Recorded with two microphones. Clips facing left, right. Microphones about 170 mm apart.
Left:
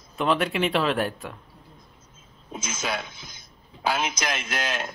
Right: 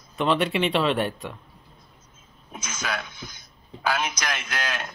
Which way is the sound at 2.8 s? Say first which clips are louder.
Even; 25° left (ahead or behind).